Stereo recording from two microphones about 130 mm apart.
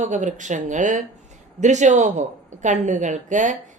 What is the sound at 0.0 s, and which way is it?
A woman's voice, 70° right (ahead or behind).